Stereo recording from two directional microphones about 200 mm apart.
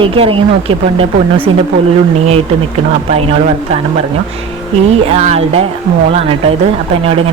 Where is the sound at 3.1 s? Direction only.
30° right (ahead or behind).